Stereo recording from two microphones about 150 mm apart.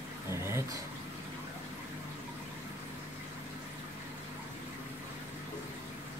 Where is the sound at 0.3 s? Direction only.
20° right (ahead or behind).